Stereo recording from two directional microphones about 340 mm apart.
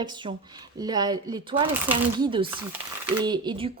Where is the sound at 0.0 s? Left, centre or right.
Centre.